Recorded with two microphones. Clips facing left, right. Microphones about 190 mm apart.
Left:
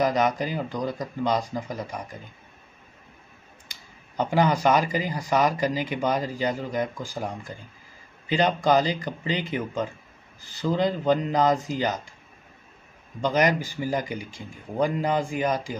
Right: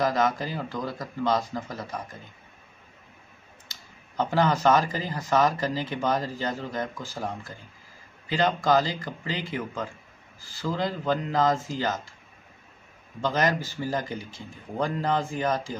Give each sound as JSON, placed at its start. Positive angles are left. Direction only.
{"t": 0.0, "sound": "speech", "side_deg": 15}
{"t": 4.2, "sound": "speech", "side_deg": 15}
{"t": 13.2, "sound": "speech", "side_deg": 15}